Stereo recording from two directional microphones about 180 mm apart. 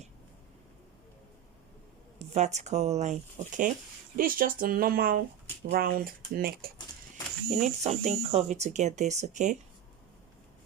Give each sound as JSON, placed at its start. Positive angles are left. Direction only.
{"t": 2.1, "sound": "speech", "side_deg": -40}
{"t": 7.5, "sound": "speech", "side_deg": -40}